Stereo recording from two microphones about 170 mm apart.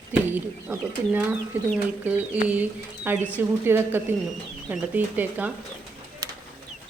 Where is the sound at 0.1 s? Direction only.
10° right (ahead or behind).